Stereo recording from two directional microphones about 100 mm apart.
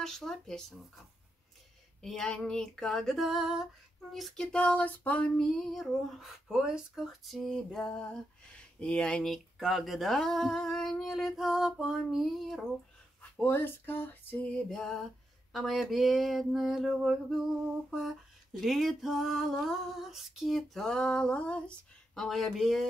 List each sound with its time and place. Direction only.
0.0 s female singing: 5° left (ahead or behind)
2.0 s female singing: 5° left (ahead or behind)
4.1 s a sound: 5° left (ahead or behind)
6.5 s female singing: 5° right (ahead or behind)
13.4 s a sound: 20° left (ahead or behind)
14.7 s female singing: 5° left (ahead or behind)